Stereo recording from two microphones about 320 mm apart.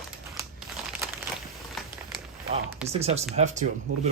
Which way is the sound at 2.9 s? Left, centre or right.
Centre.